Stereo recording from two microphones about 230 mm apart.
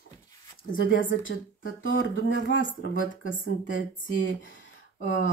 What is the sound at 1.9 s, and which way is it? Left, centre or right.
Speech, left.